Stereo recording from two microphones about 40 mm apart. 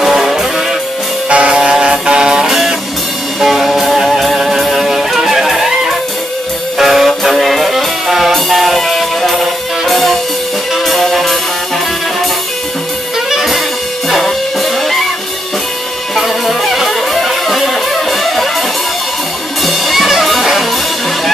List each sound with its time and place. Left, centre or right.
0.0 s music: centre
1.3 s music: right; by 11.1 s centre
13.3 s music: centre
14.0 s music: centre
16.2 s music: centre
19.6 s music: centre